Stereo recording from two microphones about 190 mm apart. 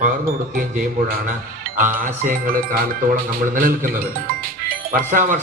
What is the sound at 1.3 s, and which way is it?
Music, 45° right (ahead or behind).